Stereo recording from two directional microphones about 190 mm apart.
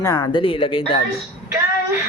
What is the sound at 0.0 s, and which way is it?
Speech, 20° left (ahead or behind).